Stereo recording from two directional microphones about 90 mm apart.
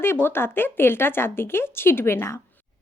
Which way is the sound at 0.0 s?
25° left (ahead or behind).